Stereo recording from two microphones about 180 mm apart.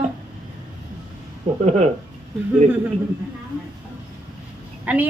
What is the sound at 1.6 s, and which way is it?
Speech, 40° right (ahead or behind).